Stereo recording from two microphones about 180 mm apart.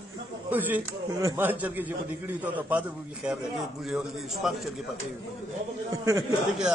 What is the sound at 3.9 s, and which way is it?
Speech, centre (ahead or behind).